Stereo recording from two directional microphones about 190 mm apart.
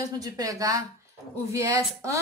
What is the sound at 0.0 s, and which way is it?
A woman's voice, 20° right (ahead or behind).